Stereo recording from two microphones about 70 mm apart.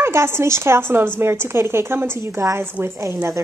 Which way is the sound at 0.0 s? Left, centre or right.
Right.